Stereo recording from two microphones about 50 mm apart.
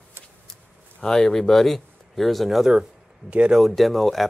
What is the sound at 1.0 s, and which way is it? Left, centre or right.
Speech, centre.